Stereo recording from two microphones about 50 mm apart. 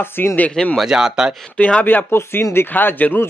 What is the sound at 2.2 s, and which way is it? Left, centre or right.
Speech, left.